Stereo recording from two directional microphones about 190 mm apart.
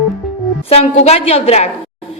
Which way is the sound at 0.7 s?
30° left (ahead or behind).